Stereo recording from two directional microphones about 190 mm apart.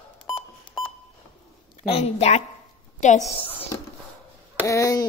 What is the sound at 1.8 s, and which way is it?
Speech, 30° left (ahead or behind).